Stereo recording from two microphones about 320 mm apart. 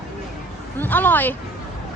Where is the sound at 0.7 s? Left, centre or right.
Centre.